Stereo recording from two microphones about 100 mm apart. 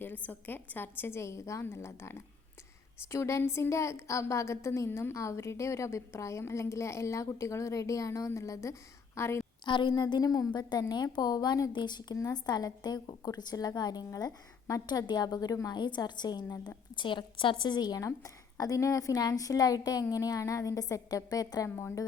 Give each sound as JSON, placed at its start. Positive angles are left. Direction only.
{"t": 0.0, "sound": "a woman's voice", "side_deg": 20}
{"t": 9.6, "sound": "a woman's voice", "side_deg": 50}